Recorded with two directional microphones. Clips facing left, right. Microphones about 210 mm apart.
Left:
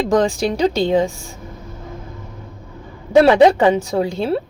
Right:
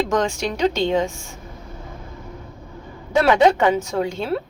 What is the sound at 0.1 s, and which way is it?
Speech, 35° left (ahead or behind).